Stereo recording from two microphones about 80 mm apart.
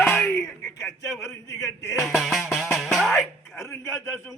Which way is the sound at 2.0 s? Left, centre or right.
Centre.